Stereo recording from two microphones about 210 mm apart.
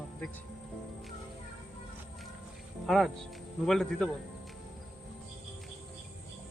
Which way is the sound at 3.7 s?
Centre (ahead or behind).